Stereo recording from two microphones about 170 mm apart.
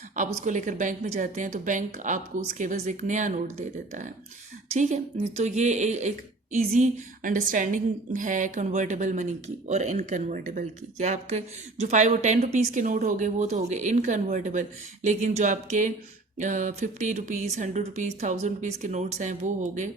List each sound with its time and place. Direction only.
0.2 s speech: 45° right (ahead or behind)